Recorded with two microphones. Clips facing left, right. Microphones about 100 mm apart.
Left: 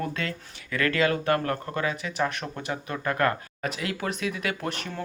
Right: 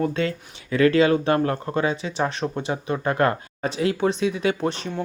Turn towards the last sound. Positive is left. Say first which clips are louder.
# right 7 dB
turn(degrees=-25)  # may be behind; listen again after turning